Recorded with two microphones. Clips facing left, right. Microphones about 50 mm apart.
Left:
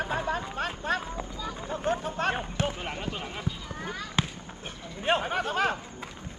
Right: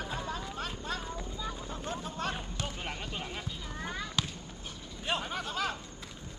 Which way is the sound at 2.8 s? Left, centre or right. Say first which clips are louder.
Left 4 dB; centre.